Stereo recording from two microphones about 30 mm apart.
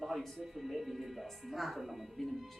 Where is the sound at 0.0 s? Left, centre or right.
Centre.